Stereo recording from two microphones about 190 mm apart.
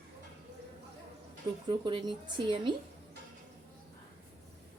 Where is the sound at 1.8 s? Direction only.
25° right (ahead or behind).